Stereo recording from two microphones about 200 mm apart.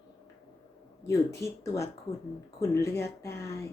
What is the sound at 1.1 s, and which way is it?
Speech, 15° left (ahead or behind).